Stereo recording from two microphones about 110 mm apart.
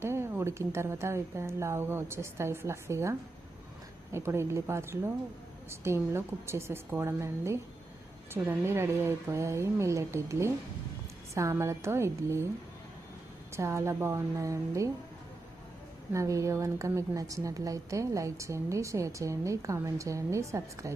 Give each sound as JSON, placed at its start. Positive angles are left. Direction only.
{"t": 0.0, "sound": "a woman's voice", "side_deg": -25}
{"t": 13.5, "sound": "a woman's voice", "side_deg": -25}
{"t": 16.1, "sound": "a woman's voice", "side_deg": -30}